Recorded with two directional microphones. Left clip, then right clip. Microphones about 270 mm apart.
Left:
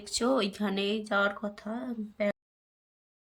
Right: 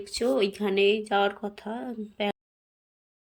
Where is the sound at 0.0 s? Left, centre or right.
Centre.